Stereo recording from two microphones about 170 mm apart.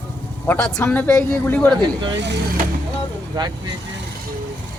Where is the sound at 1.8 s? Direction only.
25° right (ahead or behind).